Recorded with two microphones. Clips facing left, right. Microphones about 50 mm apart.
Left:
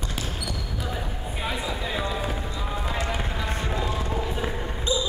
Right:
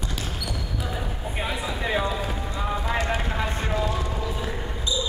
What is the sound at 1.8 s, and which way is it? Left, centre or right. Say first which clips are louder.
Run: right 7 dB; right.